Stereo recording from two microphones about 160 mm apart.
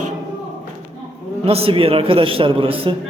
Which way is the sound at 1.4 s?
35° right (ahead or behind).